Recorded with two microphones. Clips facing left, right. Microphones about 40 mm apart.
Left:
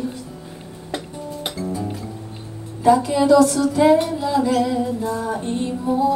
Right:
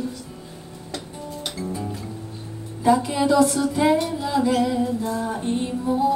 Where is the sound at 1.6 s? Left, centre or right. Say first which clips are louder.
Left 3 dB; right.